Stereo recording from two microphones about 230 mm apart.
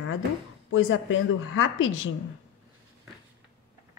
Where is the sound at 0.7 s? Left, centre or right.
Left.